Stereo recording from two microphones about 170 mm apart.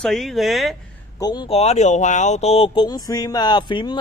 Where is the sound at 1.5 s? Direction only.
40° left (ahead or behind).